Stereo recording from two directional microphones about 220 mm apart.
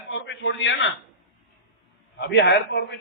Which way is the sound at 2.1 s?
50° left (ahead or behind).